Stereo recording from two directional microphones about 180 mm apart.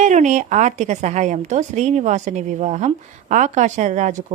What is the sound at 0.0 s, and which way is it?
A woman's voice, 40° right (ahead or behind).